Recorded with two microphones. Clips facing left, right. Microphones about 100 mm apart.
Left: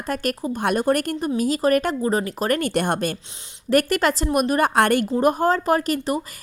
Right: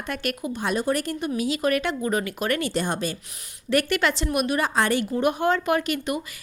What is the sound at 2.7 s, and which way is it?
Speech, 55° left (ahead or behind).